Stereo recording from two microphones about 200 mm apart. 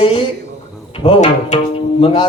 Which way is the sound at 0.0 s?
25° left (ahead or behind).